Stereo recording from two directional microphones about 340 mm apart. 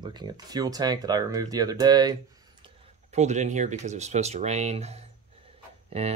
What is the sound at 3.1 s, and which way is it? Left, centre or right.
Speech, centre.